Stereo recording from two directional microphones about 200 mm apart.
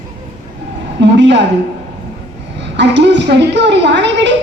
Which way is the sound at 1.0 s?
60° right (ahead or behind).